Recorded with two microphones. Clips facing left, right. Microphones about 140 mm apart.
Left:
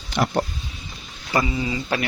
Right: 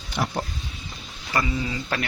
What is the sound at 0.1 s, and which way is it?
Speech, 90° left.